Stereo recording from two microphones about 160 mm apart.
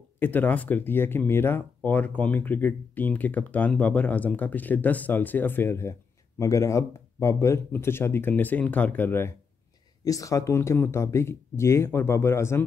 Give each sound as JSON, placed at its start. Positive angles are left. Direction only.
{"t": 0.2, "sound": "speech", "side_deg": 10}